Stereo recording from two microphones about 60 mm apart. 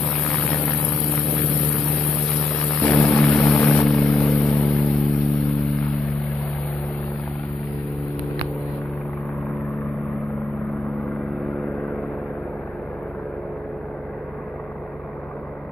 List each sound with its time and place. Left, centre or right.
2.8 s vehicle: left
4.6 s vehicle: centre